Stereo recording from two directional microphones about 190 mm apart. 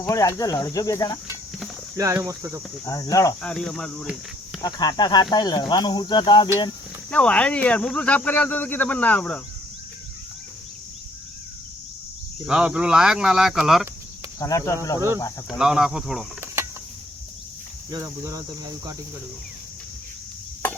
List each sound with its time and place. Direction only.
0.1 s speech: 15° left (ahead or behind)
2.0 s speech: 15° right (ahead or behind)
2.8 s speech: 20° left (ahead or behind)
3.4 s speech: 5° left (ahead or behind)
4.6 s speech: 20° left (ahead or behind)
7.1 s speech: 5° left (ahead or behind)
12.5 s speech: 5° right (ahead or behind)
14.3 s speech: 15° left (ahead or behind)
15.4 s speech: 5° right (ahead or behind)
17.9 s speech: 20° right (ahead or behind)